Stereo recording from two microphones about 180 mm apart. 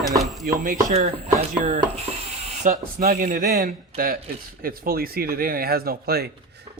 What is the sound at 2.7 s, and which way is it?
A man's voice, 55° right (ahead or behind).